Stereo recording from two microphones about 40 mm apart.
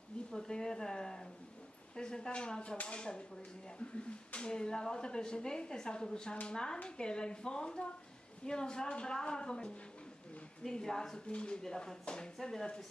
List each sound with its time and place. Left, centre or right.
0.3 s a woman's voice: centre
4.3 s a woman's voice: left
11.6 s a woman's voice: centre